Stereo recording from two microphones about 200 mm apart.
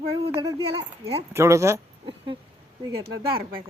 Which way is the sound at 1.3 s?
15° right (ahead or behind).